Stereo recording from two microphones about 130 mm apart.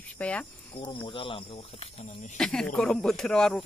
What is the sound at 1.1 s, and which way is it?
Speech, 40° left (ahead or behind).